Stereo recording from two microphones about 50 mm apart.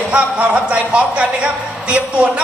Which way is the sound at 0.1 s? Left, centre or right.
Right.